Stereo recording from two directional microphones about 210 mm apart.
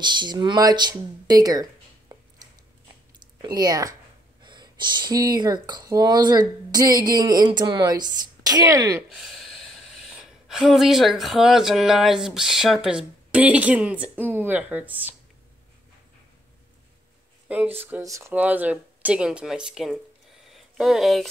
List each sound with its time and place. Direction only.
0.0 s speech: 20° right (ahead or behind)
9.1 s a sound: centre (ahead or behind)
10.0 s speech: centre (ahead or behind)
17.7 s speech: 10° right (ahead or behind)